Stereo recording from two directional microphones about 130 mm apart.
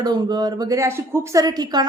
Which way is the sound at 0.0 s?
30° right (ahead or behind).